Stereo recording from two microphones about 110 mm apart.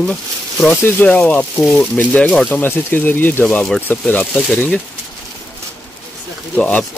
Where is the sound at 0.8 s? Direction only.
15° left (ahead or behind).